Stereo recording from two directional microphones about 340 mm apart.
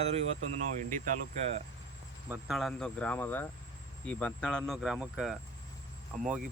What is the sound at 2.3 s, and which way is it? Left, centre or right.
Speech, centre.